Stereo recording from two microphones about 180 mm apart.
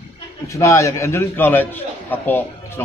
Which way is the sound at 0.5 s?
15° left (ahead or behind).